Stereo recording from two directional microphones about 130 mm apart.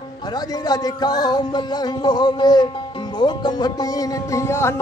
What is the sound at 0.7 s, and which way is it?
Music, 30° left (ahead or behind).